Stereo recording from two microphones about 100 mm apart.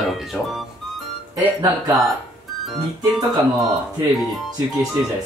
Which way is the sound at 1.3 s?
35° right (ahead or behind).